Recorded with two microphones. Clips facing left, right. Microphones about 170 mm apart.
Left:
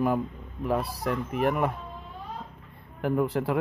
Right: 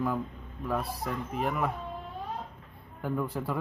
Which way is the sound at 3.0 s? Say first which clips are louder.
Left 6 dB; 85° left.